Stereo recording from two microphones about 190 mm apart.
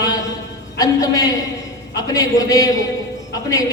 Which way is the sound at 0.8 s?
20° left (ahead or behind).